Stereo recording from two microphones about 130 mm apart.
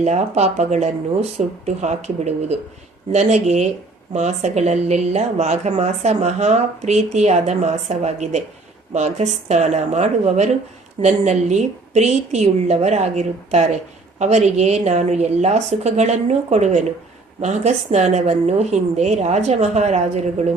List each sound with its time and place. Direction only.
0.0 s speech: 60° right (ahead or behind)